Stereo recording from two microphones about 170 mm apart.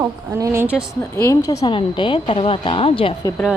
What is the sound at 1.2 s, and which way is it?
Speech, 20° left (ahead or behind).